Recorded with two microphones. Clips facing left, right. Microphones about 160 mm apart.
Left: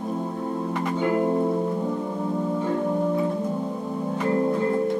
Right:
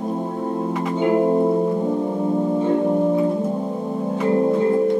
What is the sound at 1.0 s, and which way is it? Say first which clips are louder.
Music: right 6 dB; 20° right (ahead or behind).